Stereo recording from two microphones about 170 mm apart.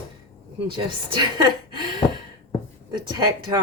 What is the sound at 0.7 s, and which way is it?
Speech, 25° right (ahead or behind).